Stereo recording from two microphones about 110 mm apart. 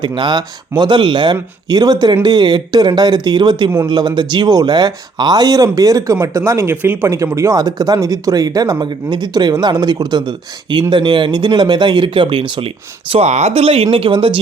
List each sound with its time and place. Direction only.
0.0 s speech: 45° right (ahead or behind)
13.1 s speech: 80° right; by 14.3 s 50° right (ahead or behind)